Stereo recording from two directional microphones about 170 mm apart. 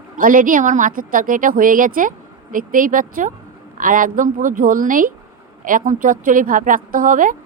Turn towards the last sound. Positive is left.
turn(degrees=-50)  # may be behind; listen again after turning